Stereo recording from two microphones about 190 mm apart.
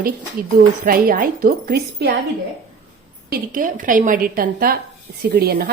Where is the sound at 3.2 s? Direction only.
50° right (ahead or behind).